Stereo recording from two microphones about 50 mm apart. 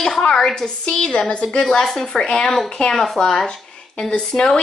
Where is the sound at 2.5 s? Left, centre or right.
Centre.